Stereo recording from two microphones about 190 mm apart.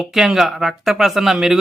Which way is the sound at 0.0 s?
Centre (ahead or behind).